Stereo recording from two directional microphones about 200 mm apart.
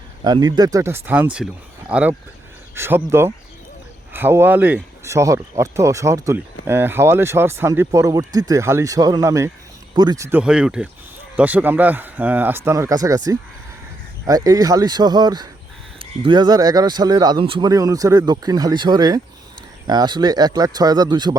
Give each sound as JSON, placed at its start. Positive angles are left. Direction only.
{"t": 0.3, "sound": "speech", "side_deg": -20}